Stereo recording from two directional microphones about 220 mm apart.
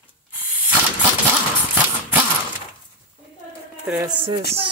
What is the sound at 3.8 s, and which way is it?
Speech, 5° right (ahead or behind).